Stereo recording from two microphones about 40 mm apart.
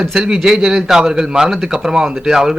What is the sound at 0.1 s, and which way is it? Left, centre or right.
A man's voice, centre.